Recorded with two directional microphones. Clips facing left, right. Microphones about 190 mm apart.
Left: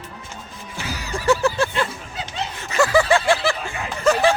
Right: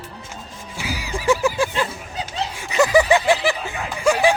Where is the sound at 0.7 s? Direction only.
10° right (ahead or behind).